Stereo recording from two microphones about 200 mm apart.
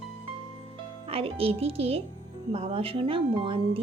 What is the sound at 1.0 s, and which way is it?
Speech, 30° right (ahead or behind).